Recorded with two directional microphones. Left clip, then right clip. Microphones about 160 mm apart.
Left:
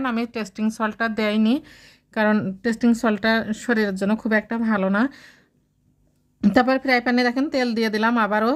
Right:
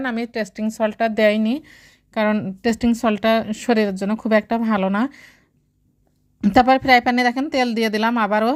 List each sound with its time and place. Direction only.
0.0 s speech: 15° right (ahead or behind)
4.3 s a woman's voice: 25° right (ahead or behind)
6.5 s a woman's voice: 20° right (ahead or behind)